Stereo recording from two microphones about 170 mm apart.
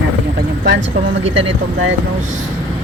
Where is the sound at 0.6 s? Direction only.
90° right.